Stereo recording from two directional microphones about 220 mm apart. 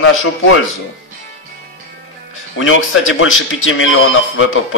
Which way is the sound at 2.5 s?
65° left (ahead or behind).